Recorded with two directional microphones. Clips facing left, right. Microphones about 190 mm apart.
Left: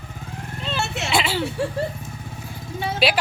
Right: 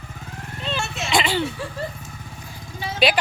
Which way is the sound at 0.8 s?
70° left (ahead or behind).